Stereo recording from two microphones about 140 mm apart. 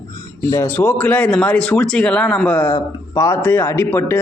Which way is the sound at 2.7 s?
25° left (ahead or behind).